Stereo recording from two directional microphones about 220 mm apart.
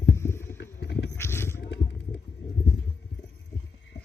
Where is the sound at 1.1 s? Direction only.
10° left (ahead or behind).